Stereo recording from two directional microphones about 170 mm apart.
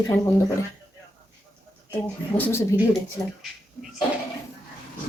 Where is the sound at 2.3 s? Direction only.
10° left (ahead or behind).